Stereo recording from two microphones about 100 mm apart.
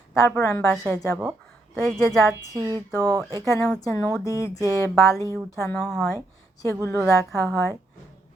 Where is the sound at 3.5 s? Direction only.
35° left (ahead or behind).